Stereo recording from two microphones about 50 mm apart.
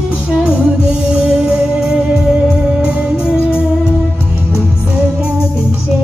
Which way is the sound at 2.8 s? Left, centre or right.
Right.